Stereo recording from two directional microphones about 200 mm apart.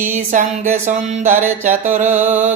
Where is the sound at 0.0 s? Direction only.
40° right (ahead or behind).